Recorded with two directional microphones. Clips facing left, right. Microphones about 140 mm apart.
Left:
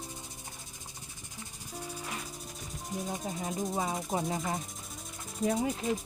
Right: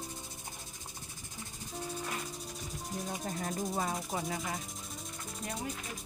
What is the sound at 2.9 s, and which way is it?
Rub, 5° left (ahead or behind).